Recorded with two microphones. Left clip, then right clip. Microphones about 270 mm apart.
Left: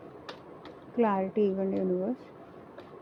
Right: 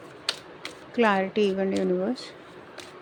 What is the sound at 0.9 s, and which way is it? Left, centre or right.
Speech, right.